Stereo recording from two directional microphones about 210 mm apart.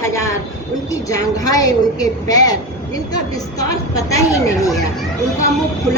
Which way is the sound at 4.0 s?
15° left (ahead or behind).